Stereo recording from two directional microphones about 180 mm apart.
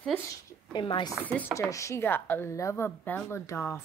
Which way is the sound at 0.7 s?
25° left (ahead or behind).